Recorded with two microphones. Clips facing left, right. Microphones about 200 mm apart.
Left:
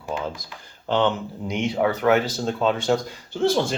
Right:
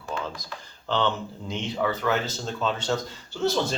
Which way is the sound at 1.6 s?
70° left (ahead or behind).